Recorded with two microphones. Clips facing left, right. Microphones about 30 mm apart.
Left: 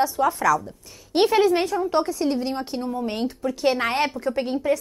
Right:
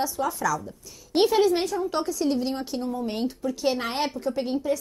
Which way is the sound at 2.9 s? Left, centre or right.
Left.